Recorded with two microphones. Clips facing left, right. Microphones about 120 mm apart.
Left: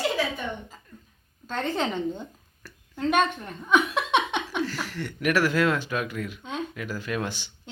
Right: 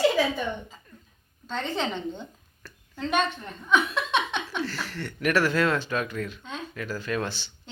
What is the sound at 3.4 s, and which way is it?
A woman's voice, 10° left (ahead or behind).